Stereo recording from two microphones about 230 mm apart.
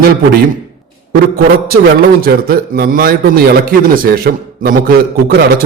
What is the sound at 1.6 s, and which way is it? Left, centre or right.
A man's voice, right.